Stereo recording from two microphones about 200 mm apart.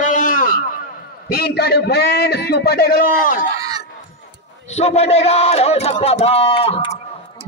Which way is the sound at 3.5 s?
20° right (ahead or behind).